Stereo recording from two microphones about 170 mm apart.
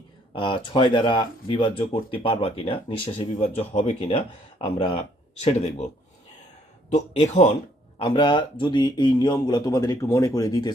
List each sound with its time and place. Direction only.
0.3 s speech: 30° left (ahead or behind)
6.9 s speech: 40° left (ahead or behind)
7.9 s a man's voice: 30° left (ahead or behind)